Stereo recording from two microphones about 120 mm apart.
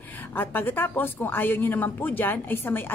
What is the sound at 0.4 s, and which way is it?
A woman's voice, 15° left (ahead or behind).